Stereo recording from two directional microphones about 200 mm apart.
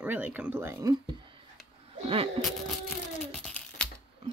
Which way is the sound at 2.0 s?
30° right (ahead or behind).